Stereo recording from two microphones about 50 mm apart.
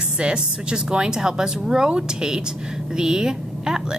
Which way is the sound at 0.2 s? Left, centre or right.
Centre.